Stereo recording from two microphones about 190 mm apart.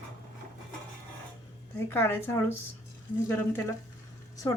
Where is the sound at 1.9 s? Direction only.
10° left (ahead or behind).